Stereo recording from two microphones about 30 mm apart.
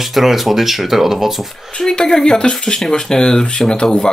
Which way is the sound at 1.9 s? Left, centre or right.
Left.